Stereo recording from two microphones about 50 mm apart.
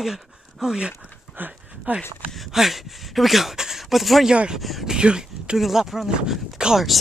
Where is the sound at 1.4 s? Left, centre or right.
Right.